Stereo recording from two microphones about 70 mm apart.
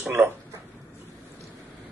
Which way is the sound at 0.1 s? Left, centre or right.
Right.